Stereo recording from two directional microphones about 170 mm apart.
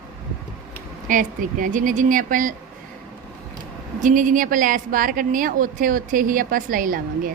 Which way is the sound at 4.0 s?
50° right (ahead or behind).